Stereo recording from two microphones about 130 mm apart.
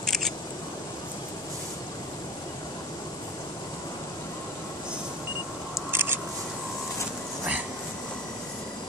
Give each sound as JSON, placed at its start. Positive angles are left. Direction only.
{"t": 0.0, "sound": "scissors", "side_deg": 5}
{"t": 5.9, "sound": "scissors", "side_deg": -15}